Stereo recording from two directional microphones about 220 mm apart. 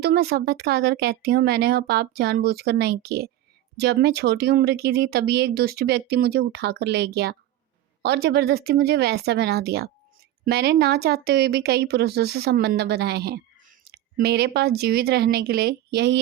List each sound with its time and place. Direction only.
0.0 s speech: 45° right (ahead or behind)